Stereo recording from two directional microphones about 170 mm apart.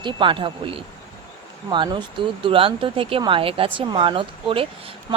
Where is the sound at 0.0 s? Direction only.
30° right (ahead or behind).